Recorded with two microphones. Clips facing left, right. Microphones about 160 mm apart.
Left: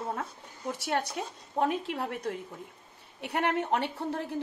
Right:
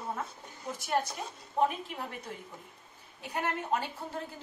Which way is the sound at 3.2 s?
70° left (ahead or behind).